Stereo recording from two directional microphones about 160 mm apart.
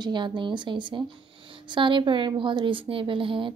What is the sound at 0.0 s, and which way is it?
A woman's voice, 30° right (ahead or behind).